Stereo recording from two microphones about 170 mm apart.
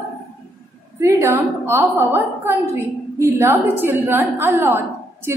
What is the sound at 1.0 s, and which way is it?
A woman's voice, 15° right (ahead or behind).